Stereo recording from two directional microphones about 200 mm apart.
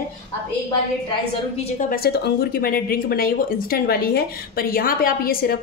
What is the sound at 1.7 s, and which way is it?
Speech, 50° left (ahead or behind).